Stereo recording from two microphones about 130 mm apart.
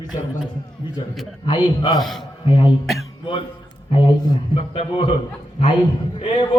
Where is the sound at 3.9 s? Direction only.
40° left (ahead or behind).